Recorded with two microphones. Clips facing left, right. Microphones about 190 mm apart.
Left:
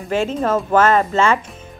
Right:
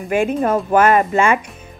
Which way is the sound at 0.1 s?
15° right (ahead or behind).